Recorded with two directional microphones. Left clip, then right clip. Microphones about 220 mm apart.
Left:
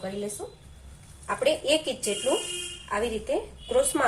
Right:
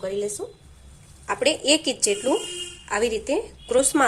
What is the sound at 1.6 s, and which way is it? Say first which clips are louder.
Speech: right 4 dB; 45° right (ahead or behind).